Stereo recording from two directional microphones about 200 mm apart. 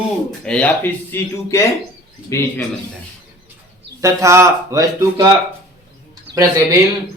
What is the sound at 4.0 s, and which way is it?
A man's voice, 15° right (ahead or behind).